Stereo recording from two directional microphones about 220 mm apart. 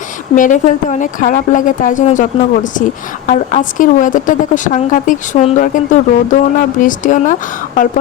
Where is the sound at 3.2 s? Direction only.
35° left (ahead or behind).